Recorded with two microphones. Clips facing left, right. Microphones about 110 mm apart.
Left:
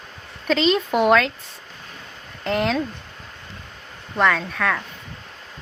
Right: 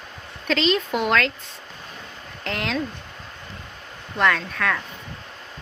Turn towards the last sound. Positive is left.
turn(degrees=0)  # may be behind; listen again after turning